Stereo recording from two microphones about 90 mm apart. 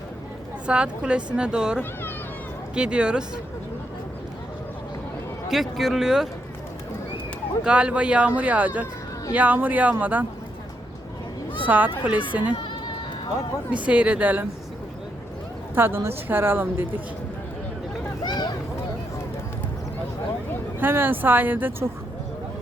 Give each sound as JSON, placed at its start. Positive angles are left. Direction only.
{"t": 0.7, "sound": "speech", "side_deg": -10}
{"t": 5.5, "sound": "speech", "side_deg": 0}
{"t": 7.6, "sound": "speech", "side_deg": -15}
{"t": 11.6, "sound": "speech", "side_deg": -20}
{"t": 13.8, "sound": "speech", "side_deg": -15}
{"t": 15.7, "sound": "a woman's voice", "side_deg": -25}
{"t": 18.2, "sound": "vehicle", "side_deg": 50}
{"t": 20.7, "sound": "a woman's voice", "side_deg": -25}